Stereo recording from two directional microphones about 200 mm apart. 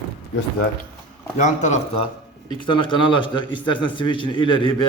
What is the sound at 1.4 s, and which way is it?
Speech, 35° left (ahead or behind).